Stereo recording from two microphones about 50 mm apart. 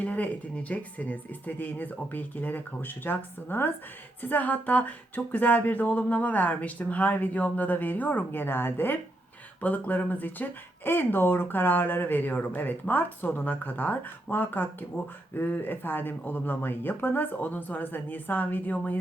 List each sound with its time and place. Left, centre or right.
0.0 s speech: left
9.6 s speech: left